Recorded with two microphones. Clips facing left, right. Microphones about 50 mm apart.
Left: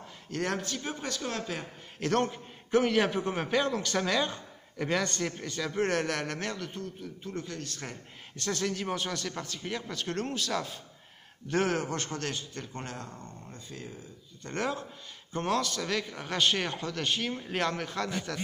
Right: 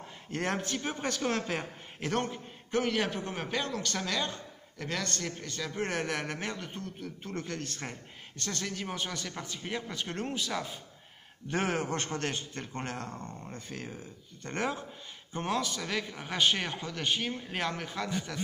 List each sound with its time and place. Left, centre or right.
0.3 s a man's voice: right
2.0 s a man's voice: centre
6.8 s speech: right
8.4 s speech: centre
11.4 s a man's voice: right
13.7 s speech: right
14.5 s speech: centre